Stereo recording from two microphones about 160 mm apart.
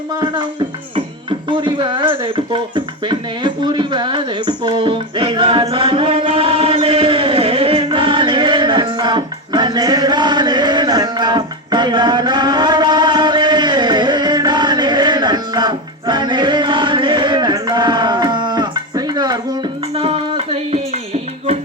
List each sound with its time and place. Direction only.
0.2 s speech: 30° right (ahead or behind)
1.5 s a sound: 30° right (ahead or behind)
19.9 s music: 35° right (ahead or behind)